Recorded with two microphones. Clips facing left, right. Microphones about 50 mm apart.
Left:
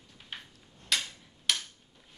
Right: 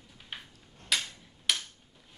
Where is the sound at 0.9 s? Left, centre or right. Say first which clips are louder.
Even; centre.